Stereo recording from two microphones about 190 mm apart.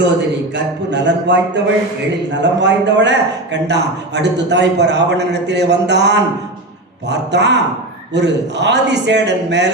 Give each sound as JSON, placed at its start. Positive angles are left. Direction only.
{"t": 0.0, "sound": "a man's voice", "side_deg": -65}
{"t": 2.4, "sound": "a man's voice", "side_deg": -70}